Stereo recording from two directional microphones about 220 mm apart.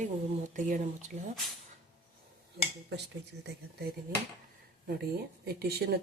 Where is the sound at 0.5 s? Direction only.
35° right (ahead or behind).